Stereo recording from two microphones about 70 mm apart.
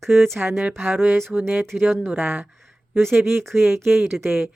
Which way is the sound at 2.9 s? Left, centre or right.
Centre.